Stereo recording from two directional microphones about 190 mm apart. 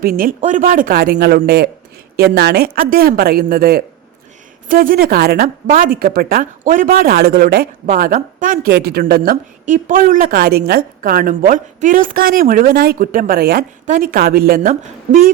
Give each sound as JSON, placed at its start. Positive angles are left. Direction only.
{"t": 0.0, "sound": "a woman's voice", "side_deg": -50}